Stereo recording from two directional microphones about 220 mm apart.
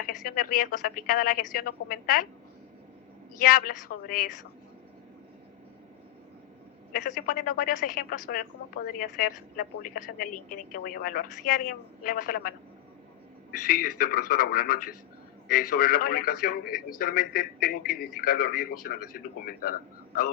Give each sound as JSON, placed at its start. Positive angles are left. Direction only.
{"t": 0.3, "sound": "a woman's voice", "side_deg": 40}
{"t": 3.3, "sound": "a woman's voice", "side_deg": 40}
{"t": 6.9, "sound": "a woman's voice", "side_deg": 40}